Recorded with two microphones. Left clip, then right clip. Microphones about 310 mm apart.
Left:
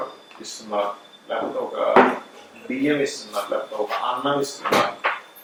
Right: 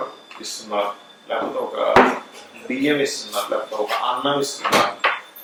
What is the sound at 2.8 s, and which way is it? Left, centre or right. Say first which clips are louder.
Speech: right 2 dB; centre.